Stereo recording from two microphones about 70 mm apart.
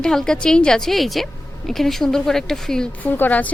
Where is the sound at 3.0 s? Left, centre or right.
Left.